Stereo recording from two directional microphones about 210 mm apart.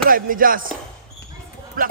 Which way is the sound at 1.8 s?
40° right (ahead or behind).